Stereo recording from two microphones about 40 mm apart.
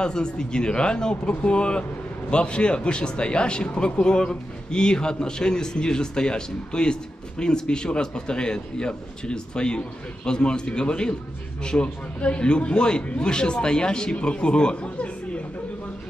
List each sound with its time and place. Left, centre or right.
0.0 s speech: left